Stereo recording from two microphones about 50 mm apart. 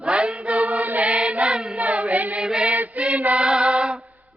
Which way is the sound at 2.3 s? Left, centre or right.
Centre.